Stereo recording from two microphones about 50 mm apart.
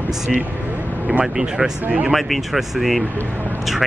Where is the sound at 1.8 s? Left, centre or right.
Right.